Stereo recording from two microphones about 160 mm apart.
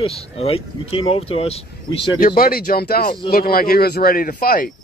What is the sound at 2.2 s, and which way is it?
Speech, 65° left (ahead or behind).